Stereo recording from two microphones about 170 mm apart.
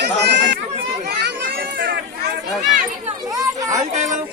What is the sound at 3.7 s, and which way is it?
Speech, 45° right (ahead or behind).